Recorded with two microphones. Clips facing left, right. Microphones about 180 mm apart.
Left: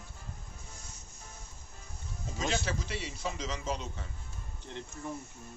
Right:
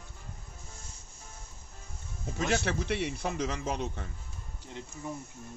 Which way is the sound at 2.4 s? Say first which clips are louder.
Right 4 dB; 60° right (ahead or behind).